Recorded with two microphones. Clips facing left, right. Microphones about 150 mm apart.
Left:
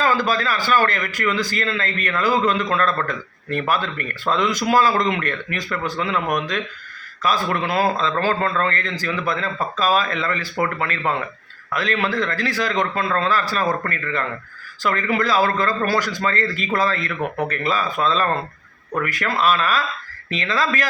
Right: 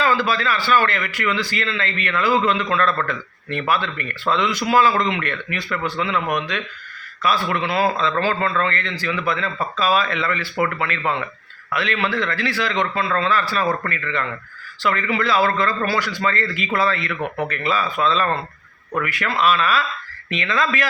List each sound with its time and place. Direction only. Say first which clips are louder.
0.0 s a man's voice: even; 40° left (ahead or behind)